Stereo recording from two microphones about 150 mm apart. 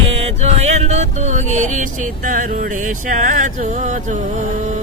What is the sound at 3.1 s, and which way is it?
Music, 60° right (ahead or behind).